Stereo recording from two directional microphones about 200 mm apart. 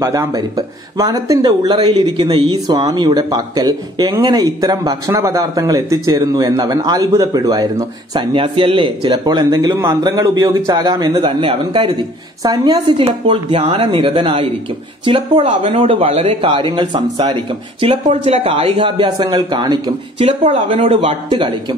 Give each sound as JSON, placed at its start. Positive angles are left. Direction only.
{"t": 0.0, "sound": "speech", "side_deg": -15}